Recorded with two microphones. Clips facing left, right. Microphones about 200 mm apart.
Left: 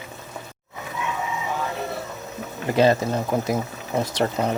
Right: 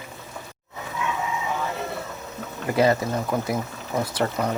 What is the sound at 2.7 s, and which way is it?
Speech, 25° left (ahead or behind).